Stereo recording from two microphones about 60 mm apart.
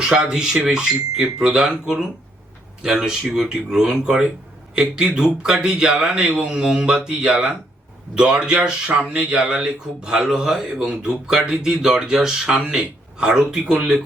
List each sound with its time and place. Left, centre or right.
0.0 s speech: centre